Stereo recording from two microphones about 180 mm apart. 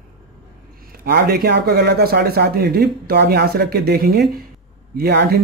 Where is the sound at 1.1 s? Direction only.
60° right (ahead or behind).